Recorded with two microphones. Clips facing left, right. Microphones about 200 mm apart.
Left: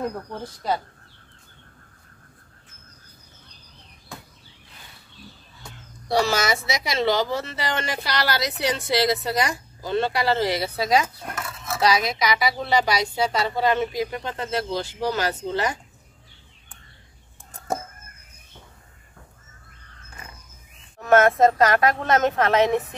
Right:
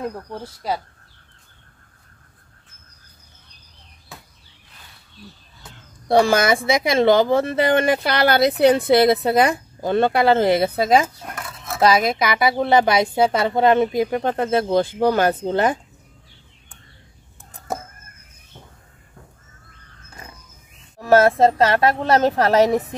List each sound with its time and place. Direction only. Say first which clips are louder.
0.3 s speech: even; 10° right (ahead or behind)
6.0 s speech: right 6 dB; 55° right (ahead or behind)
21.0 s a woman's voice: right 2 dB; 30° right (ahead or behind)